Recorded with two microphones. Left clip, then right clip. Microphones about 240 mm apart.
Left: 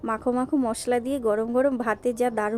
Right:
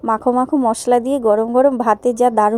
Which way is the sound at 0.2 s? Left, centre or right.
Centre.